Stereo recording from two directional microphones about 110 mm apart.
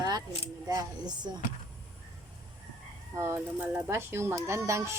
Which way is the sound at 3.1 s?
20° right (ahead or behind).